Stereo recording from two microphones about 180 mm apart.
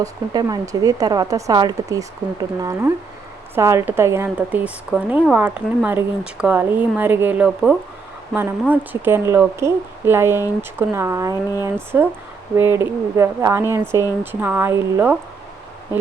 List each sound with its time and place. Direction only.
0.0 s a woman's voice: 20° right (ahead or behind)